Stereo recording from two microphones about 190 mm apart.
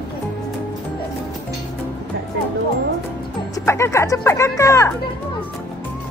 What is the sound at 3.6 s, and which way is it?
Speech, 15° left (ahead or behind).